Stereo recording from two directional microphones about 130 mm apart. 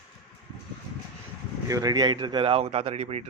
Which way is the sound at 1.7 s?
25° right (ahead or behind).